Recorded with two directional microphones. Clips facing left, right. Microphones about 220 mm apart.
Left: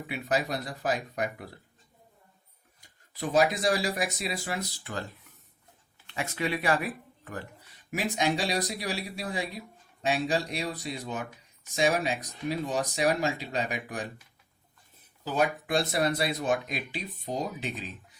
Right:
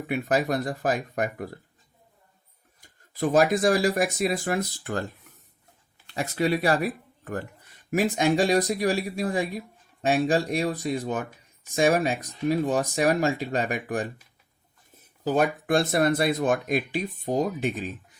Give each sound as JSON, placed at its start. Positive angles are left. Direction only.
{"t": 0.1, "sound": "speech", "side_deg": -50}
{"t": 3.2, "sound": "speech", "side_deg": -50}
{"t": 6.1, "sound": "speech", "side_deg": -40}
{"t": 15.2, "sound": "speech", "side_deg": -50}